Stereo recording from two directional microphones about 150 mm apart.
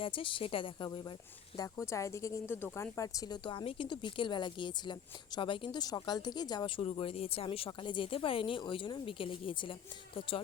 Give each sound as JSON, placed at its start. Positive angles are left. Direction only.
{"t": 0.0, "sound": "a woman's voice", "side_deg": 35}